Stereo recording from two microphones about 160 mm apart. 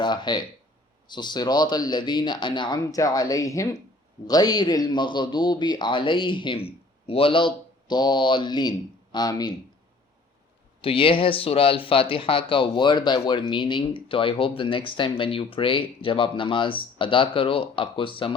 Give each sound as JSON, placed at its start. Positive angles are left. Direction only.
{"t": 0.0, "sound": "a man's voice", "side_deg": 30}
{"t": 10.8, "sound": "speech", "side_deg": 35}